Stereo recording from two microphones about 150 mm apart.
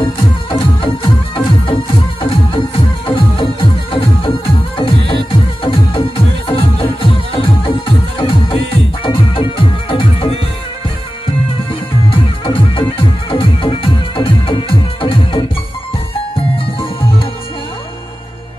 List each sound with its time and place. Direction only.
0.0 s music: 35° left (ahead or behind)
3.1 s music: 35° left (ahead or behind)
12.1 s music: 35° left (ahead or behind)